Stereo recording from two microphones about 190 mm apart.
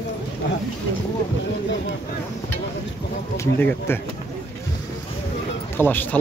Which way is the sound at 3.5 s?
10° left (ahead or behind).